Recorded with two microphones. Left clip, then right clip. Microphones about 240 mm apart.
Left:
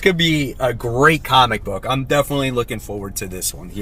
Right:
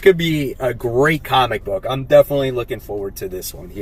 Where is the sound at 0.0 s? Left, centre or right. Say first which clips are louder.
Right 2 dB; centre.